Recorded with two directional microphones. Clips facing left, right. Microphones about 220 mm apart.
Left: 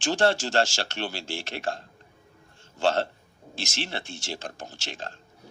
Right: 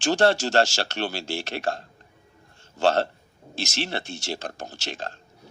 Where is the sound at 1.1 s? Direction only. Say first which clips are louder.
Right 4 dB; 40° right (ahead or behind).